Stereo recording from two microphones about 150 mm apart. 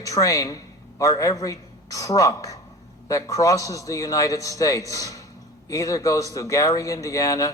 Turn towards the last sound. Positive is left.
turn(degrees=20)  # may be behind; listen again after turning